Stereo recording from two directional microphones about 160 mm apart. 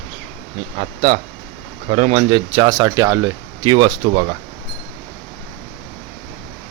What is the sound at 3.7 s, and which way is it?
Speech, 30° right (ahead or behind).